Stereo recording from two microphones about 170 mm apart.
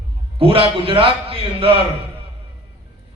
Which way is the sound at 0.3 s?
35° right (ahead or behind).